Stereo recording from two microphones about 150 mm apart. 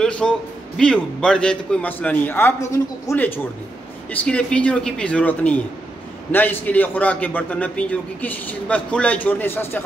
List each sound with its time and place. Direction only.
0.0 s a man's voice: 5° left (ahead or behind)
4.1 s a man's voice: 10° left (ahead or behind)